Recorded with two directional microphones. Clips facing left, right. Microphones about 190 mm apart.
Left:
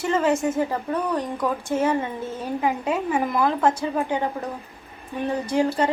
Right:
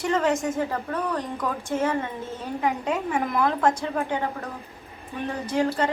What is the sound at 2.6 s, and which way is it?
A woman's voice, 5° left (ahead or behind).